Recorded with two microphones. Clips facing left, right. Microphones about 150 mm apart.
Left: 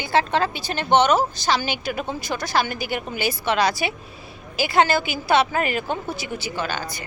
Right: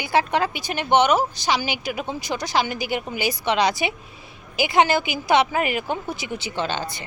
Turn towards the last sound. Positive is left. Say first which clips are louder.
# right 1 dB
turn(degrees=-25)  # may be behind; listen again after turning